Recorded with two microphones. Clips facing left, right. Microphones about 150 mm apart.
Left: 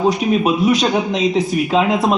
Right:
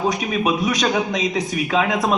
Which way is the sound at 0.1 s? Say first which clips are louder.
Left 5 dB; 30° left (ahead or behind).